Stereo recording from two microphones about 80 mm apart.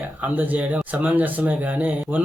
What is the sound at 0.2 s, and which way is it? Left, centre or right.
Speech, right.